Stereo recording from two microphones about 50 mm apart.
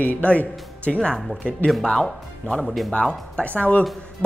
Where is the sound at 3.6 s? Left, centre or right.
Left.